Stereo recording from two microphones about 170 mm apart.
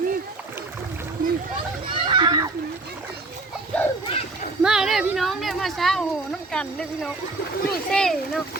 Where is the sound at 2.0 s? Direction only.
30° right (ahead or behind).